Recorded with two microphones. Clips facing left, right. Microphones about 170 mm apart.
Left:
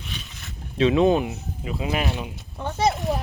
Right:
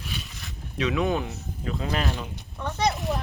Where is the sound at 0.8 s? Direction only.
25° left (ahead or behind).